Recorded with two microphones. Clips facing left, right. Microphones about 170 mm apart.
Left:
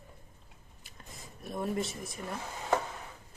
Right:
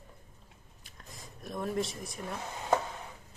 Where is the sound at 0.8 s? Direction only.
Centre (ahead or behind).